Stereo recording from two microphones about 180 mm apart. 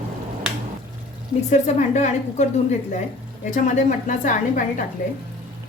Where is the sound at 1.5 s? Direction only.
40° left (ahead or behind).